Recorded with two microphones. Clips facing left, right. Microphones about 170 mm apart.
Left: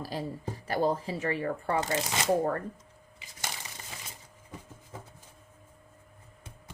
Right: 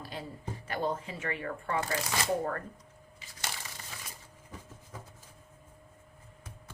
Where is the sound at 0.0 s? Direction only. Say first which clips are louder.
Left 6 dB; 35° left (ahead or behind); by 2.3 s 20° left (ahead or behind).